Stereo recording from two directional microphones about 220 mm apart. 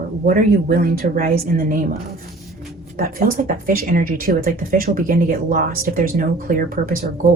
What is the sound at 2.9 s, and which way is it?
Speech, 40° right (ahead or behind).